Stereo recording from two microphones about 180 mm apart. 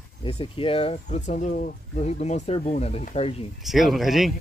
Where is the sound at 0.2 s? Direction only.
30° left (ahead or behind).